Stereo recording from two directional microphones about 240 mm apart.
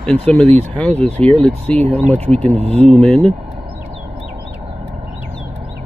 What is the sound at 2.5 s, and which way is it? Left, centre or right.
Speech, right.